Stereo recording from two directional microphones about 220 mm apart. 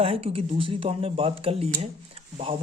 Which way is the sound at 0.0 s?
25° right (ahead or behind).